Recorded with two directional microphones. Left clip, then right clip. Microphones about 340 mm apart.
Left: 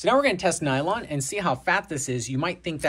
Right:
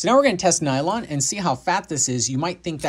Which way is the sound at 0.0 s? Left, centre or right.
Centre.